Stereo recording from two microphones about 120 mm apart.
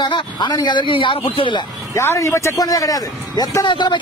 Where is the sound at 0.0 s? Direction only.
35° left (ahead or behind).